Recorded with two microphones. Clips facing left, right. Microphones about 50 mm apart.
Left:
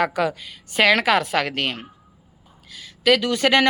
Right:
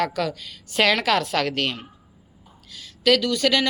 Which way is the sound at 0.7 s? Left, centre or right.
Centre.